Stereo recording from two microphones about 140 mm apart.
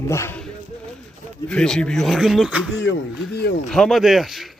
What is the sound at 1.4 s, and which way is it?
A man's voice, 5° left (ahead or behind).